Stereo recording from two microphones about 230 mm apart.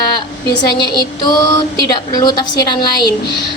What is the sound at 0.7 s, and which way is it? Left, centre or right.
A woman's voice, centre.